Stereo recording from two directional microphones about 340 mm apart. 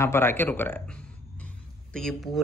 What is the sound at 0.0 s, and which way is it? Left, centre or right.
A man's voice, centre.